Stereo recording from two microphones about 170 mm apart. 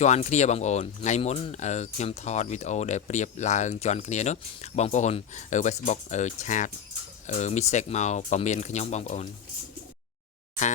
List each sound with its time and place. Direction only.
0.0 s speech: 40° left (ahead or behind)